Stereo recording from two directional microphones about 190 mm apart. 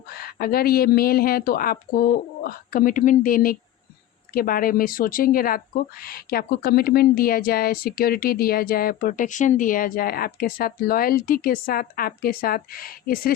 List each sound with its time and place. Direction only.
0.1 s speech: 50° left (ahead or behind)